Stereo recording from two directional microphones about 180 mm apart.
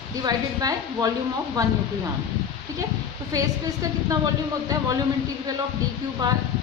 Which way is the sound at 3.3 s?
20° right (ahead or behind).